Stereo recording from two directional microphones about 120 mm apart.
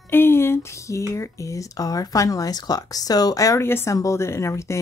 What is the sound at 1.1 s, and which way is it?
Speech, 25° left (ahead or behind).